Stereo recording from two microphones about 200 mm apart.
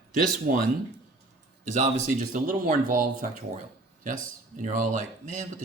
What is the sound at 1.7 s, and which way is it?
Speech, 40° right (ahead or behind).